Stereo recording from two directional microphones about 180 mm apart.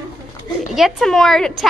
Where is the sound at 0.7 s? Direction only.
Centre (ahead or behind).